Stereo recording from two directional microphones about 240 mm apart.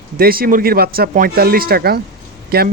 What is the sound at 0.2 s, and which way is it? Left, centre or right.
Speech, right.